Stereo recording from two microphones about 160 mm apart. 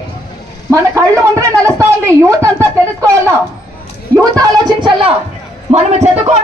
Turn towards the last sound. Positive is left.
turn(degrees=-45)  # may be behind; listen again after turning